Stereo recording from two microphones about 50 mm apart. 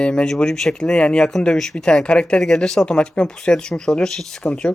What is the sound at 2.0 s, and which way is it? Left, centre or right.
Speech, centre.